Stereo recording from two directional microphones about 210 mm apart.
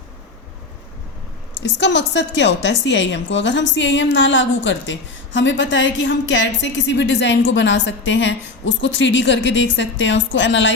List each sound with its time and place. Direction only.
1.8 s a woman's voice: 55° left (ahead or behind)